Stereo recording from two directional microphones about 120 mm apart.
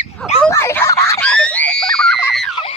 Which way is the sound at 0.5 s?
20° left (ahead or behind).